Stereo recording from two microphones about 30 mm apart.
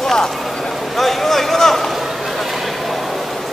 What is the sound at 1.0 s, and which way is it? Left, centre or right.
Speech, centre.